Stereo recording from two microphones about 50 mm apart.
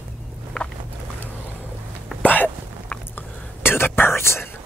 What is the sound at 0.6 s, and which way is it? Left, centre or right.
Boat, left.